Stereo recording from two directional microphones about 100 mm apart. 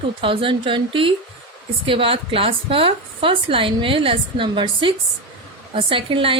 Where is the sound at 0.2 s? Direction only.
60° right (ahead or behind).